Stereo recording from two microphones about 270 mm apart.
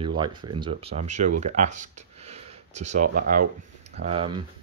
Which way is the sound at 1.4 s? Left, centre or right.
Right.